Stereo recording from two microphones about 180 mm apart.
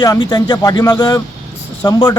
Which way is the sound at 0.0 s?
25° left (ahead or behind).